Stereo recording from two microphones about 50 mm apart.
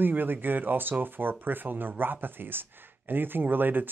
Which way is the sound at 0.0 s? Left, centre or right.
Right.